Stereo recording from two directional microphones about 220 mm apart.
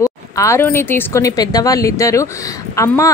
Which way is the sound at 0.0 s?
15° left (ahead or behind).